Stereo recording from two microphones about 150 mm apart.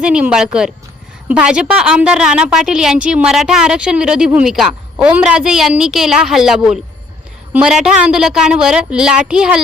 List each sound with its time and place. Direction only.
0.0 s a woman's voice: 5° right (ahead or behind)